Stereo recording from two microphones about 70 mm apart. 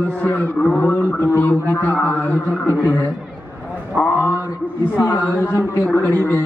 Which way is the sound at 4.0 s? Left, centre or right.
Centre.